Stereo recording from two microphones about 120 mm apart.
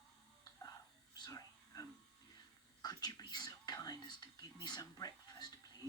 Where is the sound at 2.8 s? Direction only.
35° left (ahead or behind).